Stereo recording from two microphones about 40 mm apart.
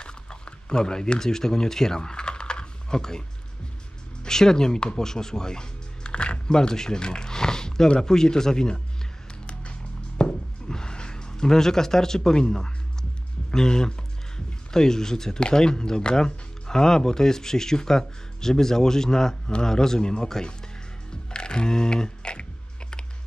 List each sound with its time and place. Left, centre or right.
0.0 s a sound: left
4.2 s speech: centre
6.5 s speech: centre
9.5 s music: left
10.7 s speech: centre
21.3 s computer keyboard: left